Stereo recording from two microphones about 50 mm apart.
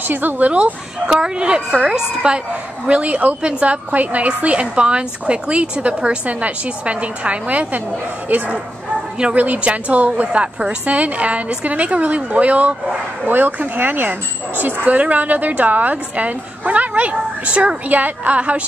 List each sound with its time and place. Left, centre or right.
0.1 s a woman's voice: right
0.5 s a woman's voice: right
8.3 s a woman's voice: right
13.3 s a woman's voice: right
17.8 s a woman's voice: right